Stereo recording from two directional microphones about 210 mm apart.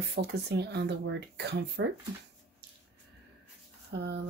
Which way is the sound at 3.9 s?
55° right (ahead or behind).